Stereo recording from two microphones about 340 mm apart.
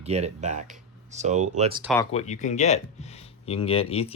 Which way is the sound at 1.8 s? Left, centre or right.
Centre.